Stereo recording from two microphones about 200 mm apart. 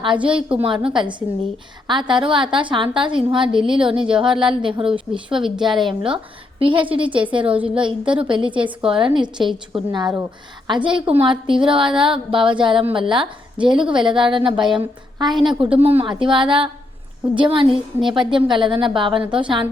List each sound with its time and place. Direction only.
0.0 s a woman's voice: 25° right (ahead or behind)
5.4 s a woman's voice: 5° right (ahead or behind)
5.8 s a woman's voice: 25° right (ahead or behind)
15.3 s a woman's voice: centre (ahead or behind)
15.8 s a woman's voice: 30° right (ahead or behind)